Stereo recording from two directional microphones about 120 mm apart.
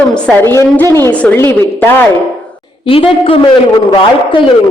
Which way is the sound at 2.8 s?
50° left (ahead or behind).